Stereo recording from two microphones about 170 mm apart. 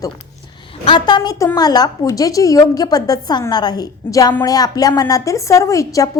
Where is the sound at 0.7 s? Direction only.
30° left (ahead or behind).